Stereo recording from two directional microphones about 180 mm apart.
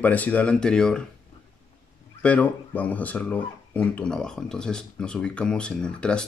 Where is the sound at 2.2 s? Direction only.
5° left (ahead or behind).